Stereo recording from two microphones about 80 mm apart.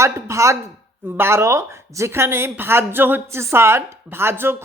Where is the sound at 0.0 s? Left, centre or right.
Right.